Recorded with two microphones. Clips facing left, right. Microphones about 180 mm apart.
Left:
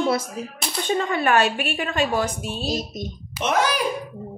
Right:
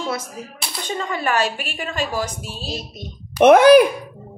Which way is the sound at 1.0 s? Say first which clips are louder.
Left 1 dB; 55° left (ahead or behind).